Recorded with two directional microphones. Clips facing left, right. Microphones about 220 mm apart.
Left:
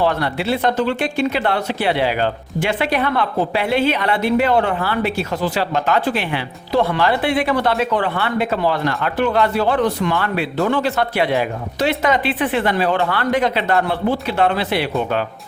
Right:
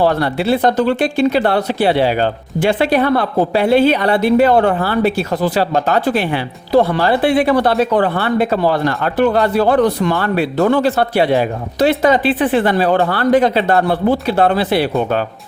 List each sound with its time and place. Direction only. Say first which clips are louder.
0.0 s speech: right 4 dB; 35° right (ahead or behind)